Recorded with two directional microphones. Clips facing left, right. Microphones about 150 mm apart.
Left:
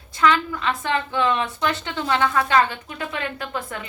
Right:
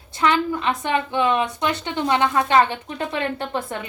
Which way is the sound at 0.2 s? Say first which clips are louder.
Even; 20° right (ahead or behind).